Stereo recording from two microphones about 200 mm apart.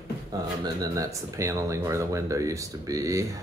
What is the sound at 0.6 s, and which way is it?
Speech, 20° right (ahead or behind).